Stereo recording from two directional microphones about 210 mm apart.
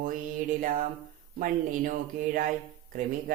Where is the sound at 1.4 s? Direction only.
40° right (ahead or behind).